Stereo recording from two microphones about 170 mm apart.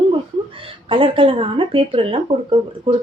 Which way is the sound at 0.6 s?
30° right (ahead or behind).